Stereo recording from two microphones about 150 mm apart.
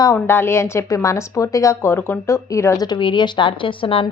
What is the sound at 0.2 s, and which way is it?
A woman's voice, 15° left (ahead or behind).